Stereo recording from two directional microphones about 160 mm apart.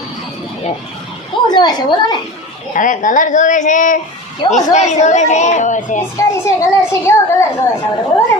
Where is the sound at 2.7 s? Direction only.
55° left (ahead or behind).